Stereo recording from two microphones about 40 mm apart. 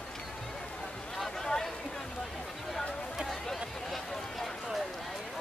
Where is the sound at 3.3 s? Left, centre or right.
Centre.